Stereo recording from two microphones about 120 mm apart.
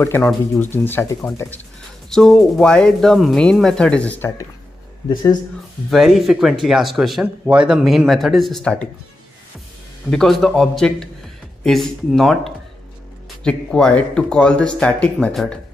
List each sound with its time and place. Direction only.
0.0 s speech: 20° left (ahead or behind)
2.0 s speech: centre (ahead or behind)
5.9 s speech: centre (ahead or behind)
10.1 s speech: centre (ahead or behind)